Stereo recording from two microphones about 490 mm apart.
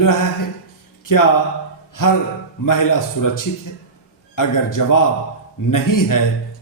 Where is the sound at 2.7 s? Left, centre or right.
Left.